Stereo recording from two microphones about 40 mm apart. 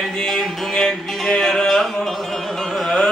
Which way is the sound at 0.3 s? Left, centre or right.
Centre.